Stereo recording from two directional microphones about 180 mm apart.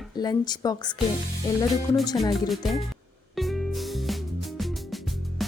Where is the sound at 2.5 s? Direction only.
Centre (ahead or behind).